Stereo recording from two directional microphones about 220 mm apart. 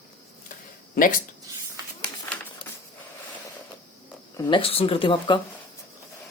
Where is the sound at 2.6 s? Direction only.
20° left (ahead or behind).